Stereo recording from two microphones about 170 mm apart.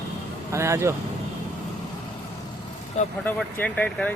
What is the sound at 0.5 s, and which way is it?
Speech, 15° right (ahead or behind).